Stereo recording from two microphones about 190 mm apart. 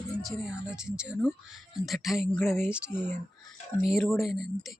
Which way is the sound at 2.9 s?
10° left (ahead or behind).